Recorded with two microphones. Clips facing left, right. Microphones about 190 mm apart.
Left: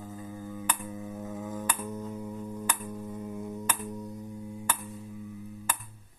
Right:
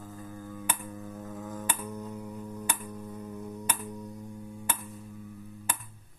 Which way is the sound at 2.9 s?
10° left (ahead or behind).